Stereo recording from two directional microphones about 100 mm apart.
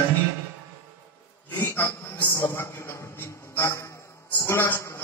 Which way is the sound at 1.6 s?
20° left (ahead or behind).